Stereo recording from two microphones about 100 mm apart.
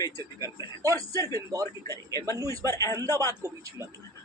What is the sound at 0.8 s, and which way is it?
Speech, 35° right (ahead or behind).